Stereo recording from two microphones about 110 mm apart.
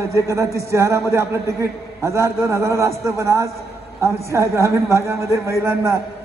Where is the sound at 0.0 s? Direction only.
25° right (ahead or behind).